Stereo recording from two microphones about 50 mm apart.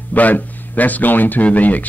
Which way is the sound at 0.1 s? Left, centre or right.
Left.